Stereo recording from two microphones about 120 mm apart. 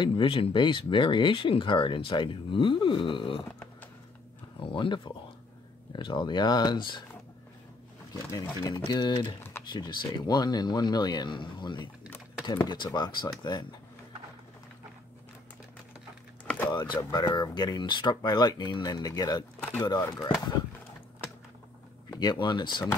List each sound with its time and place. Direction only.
0.0 s speech: 45° left (ahead or behind)
4.6 s speech: 45° left (ahead or behind)
8.3 s speech: 35° left (ahead or behind)
16.6 s speech: 40° left (ahead or behind)
20.2 s speech: 5° right (ahead or behind)
22.2 s speech: 40° left (ahead or behind)